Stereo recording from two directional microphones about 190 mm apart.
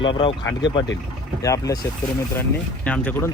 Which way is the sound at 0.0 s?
25° left (ahead or behind).